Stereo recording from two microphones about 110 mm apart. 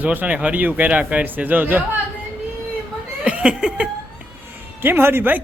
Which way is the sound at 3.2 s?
10° right (ahead or behind).